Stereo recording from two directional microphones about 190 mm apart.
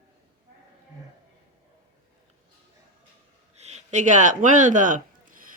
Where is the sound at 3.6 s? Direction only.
35° right (ahead or behind).